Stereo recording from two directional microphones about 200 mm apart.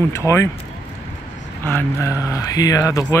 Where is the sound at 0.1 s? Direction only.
15° left (ahead or behind).